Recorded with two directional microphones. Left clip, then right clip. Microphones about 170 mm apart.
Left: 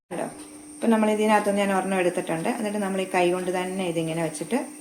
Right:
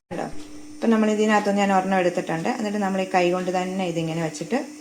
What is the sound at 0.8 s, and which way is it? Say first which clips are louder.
Speech: right 1 dB; 20° right (ahead or behind).